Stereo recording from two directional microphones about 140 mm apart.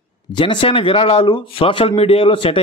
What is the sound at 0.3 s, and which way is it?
Speech, 35° left (ahead or behind).